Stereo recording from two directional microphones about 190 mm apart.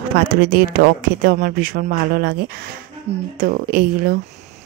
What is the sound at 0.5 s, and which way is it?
A child's voice, 50° right (ahead or behind).